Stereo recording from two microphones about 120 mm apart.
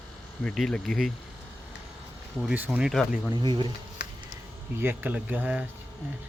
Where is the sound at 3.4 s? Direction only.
40° right (ahead or behind).